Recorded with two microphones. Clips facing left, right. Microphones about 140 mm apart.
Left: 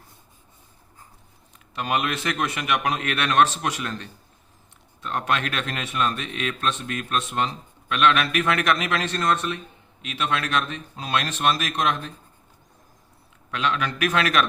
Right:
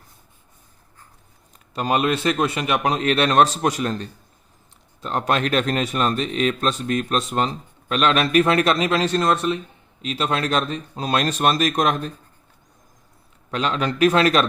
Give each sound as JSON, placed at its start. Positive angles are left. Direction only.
{"t": 1.7, "sound": "speech", "side_deg": -35}
{"t": 9.3, "sound": "speech", "side_deg": -15}
{"t": 10.0, "sound": "speech", "side_deg": -35}
{"t": 13.5, "sound": "speech", "side_deg": -35}